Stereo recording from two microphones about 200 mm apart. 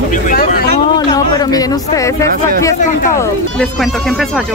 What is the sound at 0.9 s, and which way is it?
Speech, 20° left (ahead or behind).